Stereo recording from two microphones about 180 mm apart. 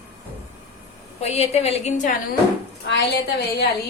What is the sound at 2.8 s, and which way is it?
Speech, 70° left (ahead or behind).